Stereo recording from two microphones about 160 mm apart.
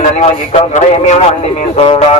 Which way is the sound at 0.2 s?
45° left (ahead or behind).